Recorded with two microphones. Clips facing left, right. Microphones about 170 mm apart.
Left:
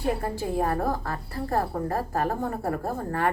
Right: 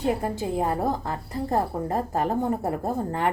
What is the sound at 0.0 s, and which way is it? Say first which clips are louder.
A woman's voice: right 2 dB; 20° right (ahead or behind).